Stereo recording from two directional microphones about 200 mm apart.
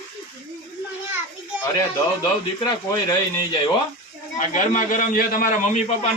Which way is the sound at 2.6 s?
20° left (ahead or behind).